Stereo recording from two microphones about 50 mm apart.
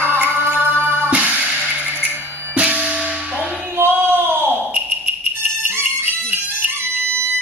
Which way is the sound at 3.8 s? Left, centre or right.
Right.